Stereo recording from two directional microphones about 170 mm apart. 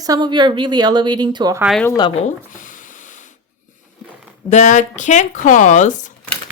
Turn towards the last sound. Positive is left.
turn(degrees=45)  # may be behind; listen again after turning